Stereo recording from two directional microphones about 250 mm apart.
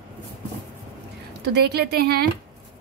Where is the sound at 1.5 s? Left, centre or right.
Right.